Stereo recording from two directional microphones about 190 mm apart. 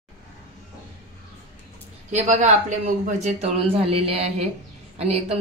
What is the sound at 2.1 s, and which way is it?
A man's voice, 40° right (ahead or behind).